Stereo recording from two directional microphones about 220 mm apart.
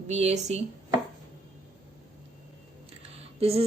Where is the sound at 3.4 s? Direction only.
25° right (ahead or behind).